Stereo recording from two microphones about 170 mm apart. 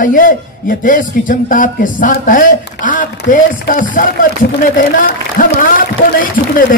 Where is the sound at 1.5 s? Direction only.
50° left (ahead or behind).